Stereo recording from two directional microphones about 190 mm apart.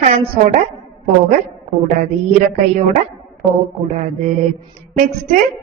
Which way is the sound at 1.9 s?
40° right (ahead or behind).